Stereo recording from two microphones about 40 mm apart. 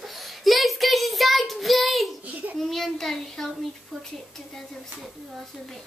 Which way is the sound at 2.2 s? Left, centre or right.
Right.